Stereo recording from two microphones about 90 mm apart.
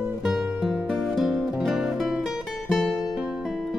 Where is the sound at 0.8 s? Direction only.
5° left (ahead or behind).